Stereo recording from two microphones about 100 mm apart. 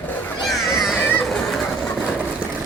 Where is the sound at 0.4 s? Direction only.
Centre (ahead or behind).